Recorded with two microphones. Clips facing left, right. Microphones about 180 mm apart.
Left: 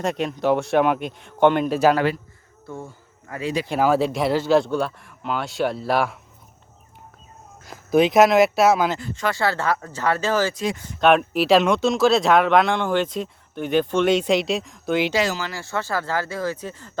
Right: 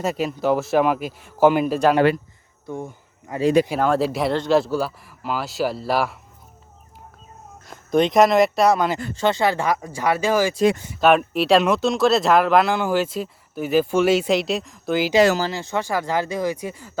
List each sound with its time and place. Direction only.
0.0 s speech: 5° right (ahead or behind)
2.6 s a sound: 15° right (ahead or behind)
3.7 s speech: 5° left (ahead or behind)
7.7 s speech: 5° left (ahead or behind)
9.1 s speech: 25° right (ahead or behind)
10.9 s speech: centre (ahead or behind)
15.5 s speech: 20° right (ahead or behind)